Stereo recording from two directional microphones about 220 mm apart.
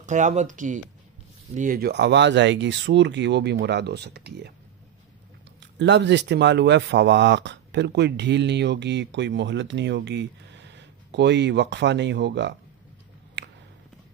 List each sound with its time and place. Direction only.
0.0 s speech: 35° right (ahead or behind); by 4.6 s 50° right (ahead or behind)
5.6 s speech: 55° right (ahead or behind)
13.4 s a sound: 55° right (ahead or behind)